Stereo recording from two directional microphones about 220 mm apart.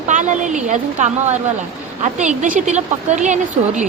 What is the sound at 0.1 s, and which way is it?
Speech, 35° right (ahead or behind).